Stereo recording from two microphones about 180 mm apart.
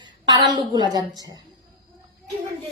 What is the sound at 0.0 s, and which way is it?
A woman's voice, 25° right (ahead or behind).